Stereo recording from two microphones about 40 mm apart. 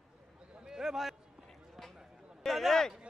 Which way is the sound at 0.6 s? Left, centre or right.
Centre.